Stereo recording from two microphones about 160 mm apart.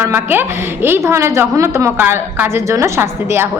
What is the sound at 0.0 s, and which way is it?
A woman's voice, 15° right (ahead or behind).